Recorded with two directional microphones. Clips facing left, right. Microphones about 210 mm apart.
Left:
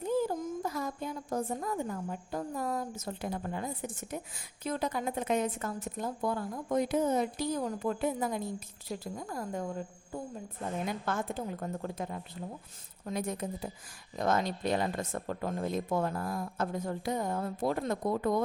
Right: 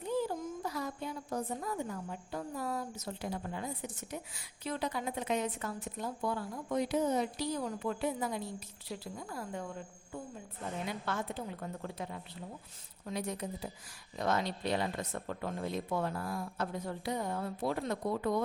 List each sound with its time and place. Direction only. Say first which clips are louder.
0.0 s a child's voice: left 4 dB; 45° left (ahead or behind)
10.8 s a child's voice: left 2 dB; 50° left (ahead or behind)